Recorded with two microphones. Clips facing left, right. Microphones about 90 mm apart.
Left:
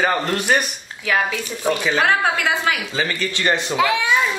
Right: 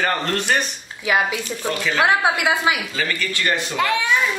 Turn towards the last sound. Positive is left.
turn(degrees=5)  # may be behind; listen again after turning